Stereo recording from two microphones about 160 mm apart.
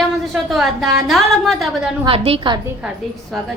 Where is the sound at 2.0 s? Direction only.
35° right (ahead or behind).